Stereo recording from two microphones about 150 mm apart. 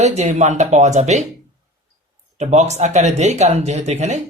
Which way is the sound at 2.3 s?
50° right (ahead or behind).